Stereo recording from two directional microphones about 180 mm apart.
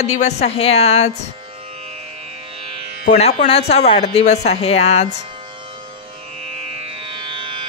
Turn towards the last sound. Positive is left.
turn(degrees=-25)  # may be behind; listen again after turning